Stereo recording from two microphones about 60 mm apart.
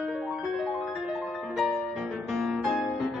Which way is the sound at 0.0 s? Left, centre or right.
Centre.